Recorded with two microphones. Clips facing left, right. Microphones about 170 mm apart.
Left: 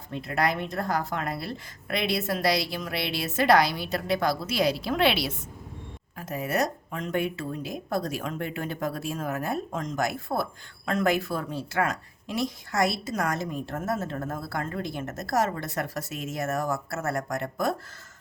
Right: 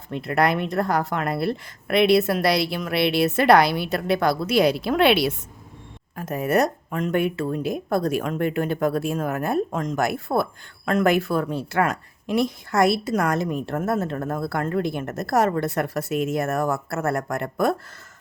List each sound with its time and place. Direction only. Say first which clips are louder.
0.1 s speech: right 6 dB; 65° right (ahead or behind)